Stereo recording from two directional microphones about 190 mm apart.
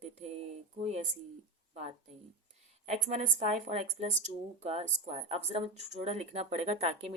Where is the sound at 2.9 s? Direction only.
35° right (ahead or behind).